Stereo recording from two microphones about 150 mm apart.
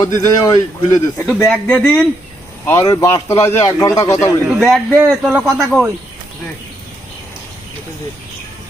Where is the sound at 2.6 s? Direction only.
20° left (ahead or behind).